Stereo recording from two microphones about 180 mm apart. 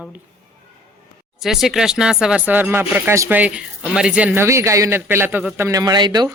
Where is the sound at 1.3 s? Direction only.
Centre (ahead or behind); by 6.3 s 25° right (ahead or behind).